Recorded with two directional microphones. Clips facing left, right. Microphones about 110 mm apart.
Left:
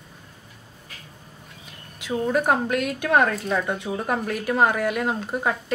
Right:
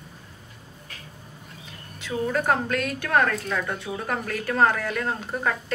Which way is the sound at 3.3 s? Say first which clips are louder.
Left 3 dB; 30° left (ahead or behind).